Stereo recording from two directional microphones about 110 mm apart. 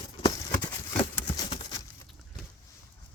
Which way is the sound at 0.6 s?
45° left (ahead or behind).